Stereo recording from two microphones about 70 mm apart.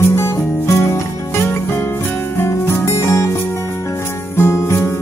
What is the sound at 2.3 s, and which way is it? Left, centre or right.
Music, left.